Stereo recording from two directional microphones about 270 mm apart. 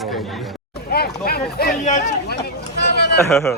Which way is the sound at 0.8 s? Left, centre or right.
Left.